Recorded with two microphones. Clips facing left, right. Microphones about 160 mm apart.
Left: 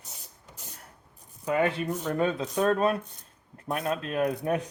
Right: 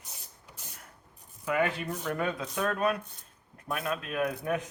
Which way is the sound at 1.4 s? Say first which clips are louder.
Left 3 dB; 30° left (ahead or behind).